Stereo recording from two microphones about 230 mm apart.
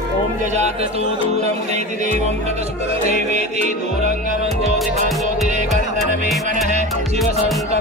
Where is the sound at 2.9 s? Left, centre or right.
Right.